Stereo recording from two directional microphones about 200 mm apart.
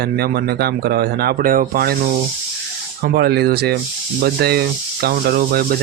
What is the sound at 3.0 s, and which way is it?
A man's voice, 55° right (ahead or behind).